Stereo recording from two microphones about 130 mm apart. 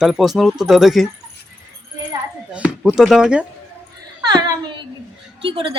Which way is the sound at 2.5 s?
10° right (ahead or behind).